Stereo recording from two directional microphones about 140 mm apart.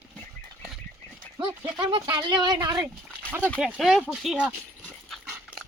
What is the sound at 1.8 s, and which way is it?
Speech, 30° right (ahead or behind).